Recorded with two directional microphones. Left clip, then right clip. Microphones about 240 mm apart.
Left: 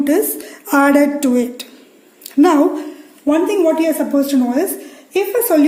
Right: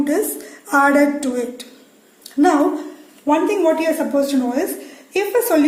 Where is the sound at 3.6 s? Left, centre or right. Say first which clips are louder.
Left 2 dB; left.